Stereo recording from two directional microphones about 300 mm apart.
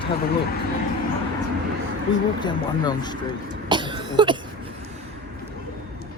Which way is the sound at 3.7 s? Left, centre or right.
Centre.